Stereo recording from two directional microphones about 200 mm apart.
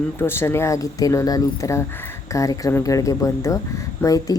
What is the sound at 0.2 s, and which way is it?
Speech, 10° left (ahead or behind).